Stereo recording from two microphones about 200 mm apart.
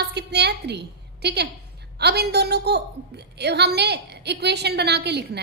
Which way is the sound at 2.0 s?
55° right (ahead or behind).